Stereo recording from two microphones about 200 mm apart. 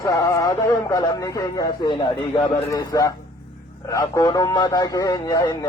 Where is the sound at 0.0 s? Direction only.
20° left (ahead or behind).